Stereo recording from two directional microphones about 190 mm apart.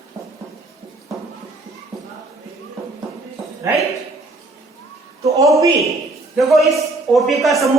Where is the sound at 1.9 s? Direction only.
Centre (ahead or behind).